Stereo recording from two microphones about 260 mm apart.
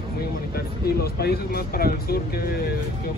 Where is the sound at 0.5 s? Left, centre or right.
Left.